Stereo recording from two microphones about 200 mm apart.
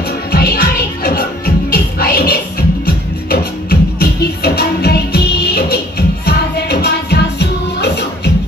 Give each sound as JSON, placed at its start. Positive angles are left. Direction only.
{"t": 0.3, "sound": "music", "side_deg": 50}
{"t": 4.0, "sound": "music", "side_deg": 50}